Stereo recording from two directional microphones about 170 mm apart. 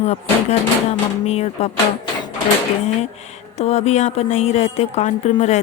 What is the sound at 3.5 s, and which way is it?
A woman's voice, 40° left (ahead or behind).